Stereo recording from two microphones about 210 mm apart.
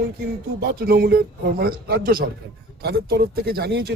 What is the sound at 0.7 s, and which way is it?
A man's voice, 45° right (ahead or behind).